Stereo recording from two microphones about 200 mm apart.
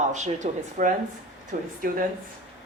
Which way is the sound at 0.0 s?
35° right (ahead or behind).